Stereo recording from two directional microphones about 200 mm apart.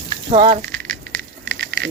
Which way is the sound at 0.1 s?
30° right (ahead or behind).